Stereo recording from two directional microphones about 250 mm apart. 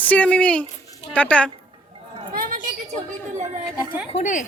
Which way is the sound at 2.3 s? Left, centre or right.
Right.